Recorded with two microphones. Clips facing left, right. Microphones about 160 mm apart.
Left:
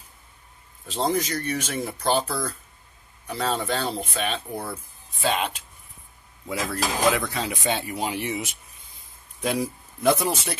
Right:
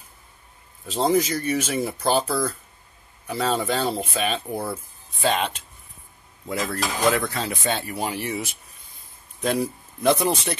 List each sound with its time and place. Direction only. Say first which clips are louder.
0.8 s speech: right 4 dB; 5° right (ahead or behind)
6.6 s speech: even; centre (ahead or behind)
7.2 s speech: right 1 dB; 15° left (ahead or behind)